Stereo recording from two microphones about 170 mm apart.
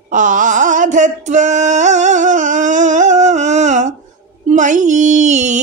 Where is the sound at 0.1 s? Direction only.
50° right (ahead or behind).